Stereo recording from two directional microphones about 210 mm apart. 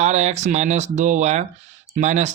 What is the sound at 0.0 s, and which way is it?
Speech, 35° right (ahead or behind).